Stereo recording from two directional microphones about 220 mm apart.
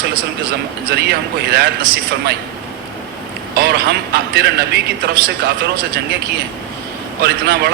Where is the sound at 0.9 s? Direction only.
45° right (ahead or behind).